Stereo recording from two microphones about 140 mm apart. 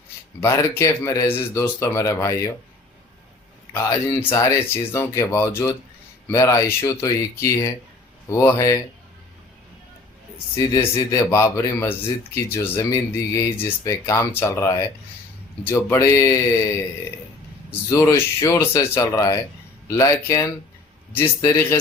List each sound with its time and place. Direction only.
0.4 s speech: 20° left (ahead or behind)
3.7 s speech: 20° left (ahead or behind)
10.3 s speech: 20° left (ahead or behind)
17.9 s speech: 25° left (ahead or behind)